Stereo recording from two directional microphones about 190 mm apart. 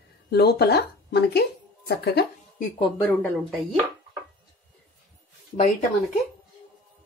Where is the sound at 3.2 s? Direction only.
Centre (ahead or behind).